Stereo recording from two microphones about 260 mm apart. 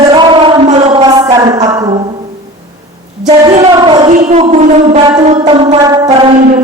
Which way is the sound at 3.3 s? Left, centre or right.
Right.